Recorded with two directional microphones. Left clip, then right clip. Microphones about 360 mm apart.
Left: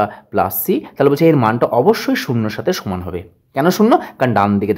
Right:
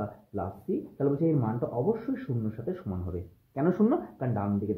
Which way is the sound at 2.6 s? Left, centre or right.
Left.